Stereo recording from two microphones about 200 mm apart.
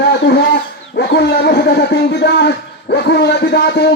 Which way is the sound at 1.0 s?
55° left (ahead or behind).